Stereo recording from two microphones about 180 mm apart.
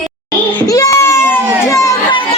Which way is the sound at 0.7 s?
20° left (ahead or behind).